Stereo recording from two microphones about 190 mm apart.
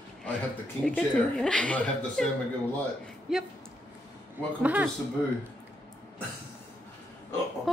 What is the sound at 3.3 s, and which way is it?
Speech, 5° right (ahead or behind).